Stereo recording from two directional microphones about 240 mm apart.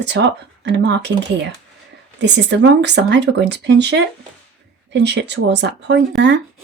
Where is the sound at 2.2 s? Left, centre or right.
Right.